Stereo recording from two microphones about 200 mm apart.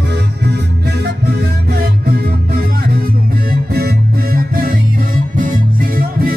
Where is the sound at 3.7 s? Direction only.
50° right (ahead or behind).